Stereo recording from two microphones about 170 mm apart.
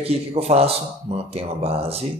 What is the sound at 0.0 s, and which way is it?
Speech, 35° right (ahead or behind).